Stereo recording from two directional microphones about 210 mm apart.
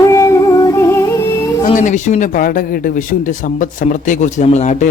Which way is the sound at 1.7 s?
35° left (ahead or behind).